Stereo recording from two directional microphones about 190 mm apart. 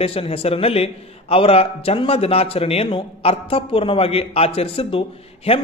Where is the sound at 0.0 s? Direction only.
30° left (ahead or behind).